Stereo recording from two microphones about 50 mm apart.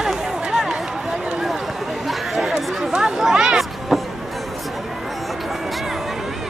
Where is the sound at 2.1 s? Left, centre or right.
Centre.